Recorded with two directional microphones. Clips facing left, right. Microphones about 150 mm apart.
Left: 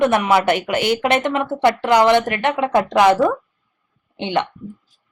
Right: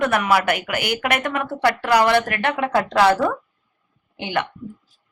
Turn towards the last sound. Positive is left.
turn(degrees=25)  # may be behind; listen again after turning